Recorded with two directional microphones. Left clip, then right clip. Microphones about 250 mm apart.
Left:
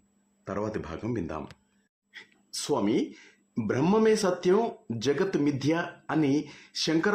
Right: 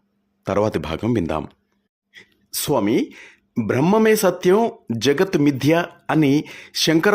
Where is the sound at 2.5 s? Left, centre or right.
Right.